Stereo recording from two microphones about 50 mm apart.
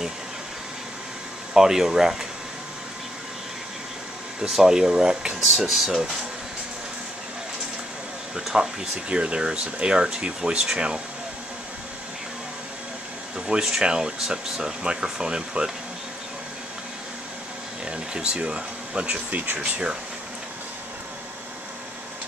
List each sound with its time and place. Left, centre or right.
1.5 s speech: centre
4.4 s speech: centre
8.5 s speech: centre
13.5 s speech: centre
17.8 s speech: centre